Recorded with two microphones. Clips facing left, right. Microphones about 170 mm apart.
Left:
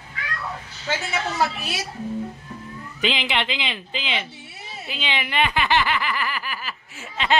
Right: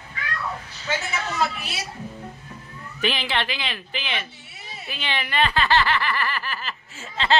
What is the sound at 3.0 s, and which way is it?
Speech, 20° left (ahead or behind).